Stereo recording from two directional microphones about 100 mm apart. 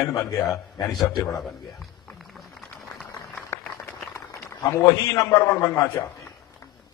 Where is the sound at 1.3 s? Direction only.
Centre (ahead or behind).